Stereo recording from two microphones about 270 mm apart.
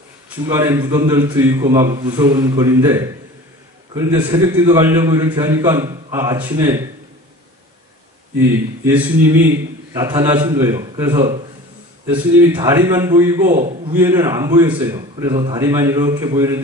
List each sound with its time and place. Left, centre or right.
0.5 s a man's voice: centre
8.8 s a man's voice: centre
12.5 s a man's voice: centre
13.6 s a man's voice: right
13.9 s a man's voice: centre